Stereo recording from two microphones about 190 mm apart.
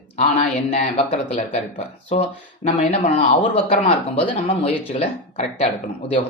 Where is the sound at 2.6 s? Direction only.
30° left (ahead or behind).